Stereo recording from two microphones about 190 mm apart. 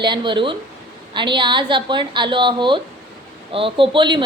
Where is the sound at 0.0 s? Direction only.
25° right (ahead or behind).